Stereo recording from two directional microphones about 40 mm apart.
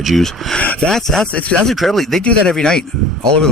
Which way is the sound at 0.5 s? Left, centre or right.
Left.